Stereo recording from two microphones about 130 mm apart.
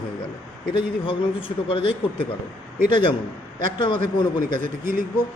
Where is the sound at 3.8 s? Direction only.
35° left (ahead or behind).